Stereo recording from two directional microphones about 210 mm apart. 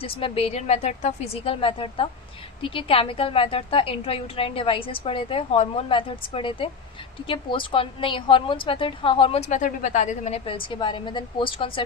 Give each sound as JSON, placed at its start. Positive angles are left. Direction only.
{"t": 0.0, "sound": "a woman's voice", "side_deg": 25}